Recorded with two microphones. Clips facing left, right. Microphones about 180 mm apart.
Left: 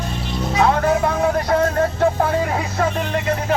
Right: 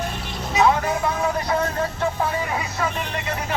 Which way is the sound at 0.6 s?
55° left (ahead or behind).